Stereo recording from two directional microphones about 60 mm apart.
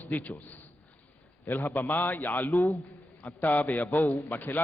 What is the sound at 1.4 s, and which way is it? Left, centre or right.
A man's voice, left.